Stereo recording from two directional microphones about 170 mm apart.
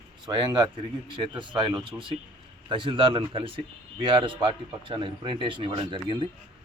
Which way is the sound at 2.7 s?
30° right (ahead or behind).